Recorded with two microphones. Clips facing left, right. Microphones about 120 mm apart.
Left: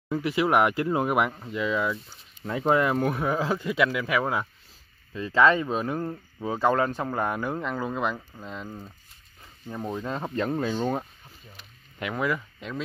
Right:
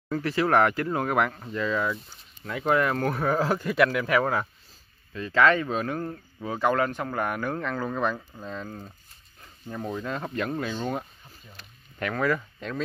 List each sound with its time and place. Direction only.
0.1 s speech: 15° left (ahead or behind)
2.4 s speech: 30° left (ahead or behind)
3.1 s speech: 5° left (ahead or behind)
5.1 s speech: 25° left (ahead or behind); by 8.9 s centre (ahead or behind)
9.7 s speech: 10° left (ahead or behind)
10.0 s speech: 30° left (ahead or behind)
12.0 s speech: 10° left (ahead or behind)